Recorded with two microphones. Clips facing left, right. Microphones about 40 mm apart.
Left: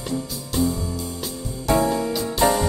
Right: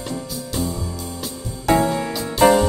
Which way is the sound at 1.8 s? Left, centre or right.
Right.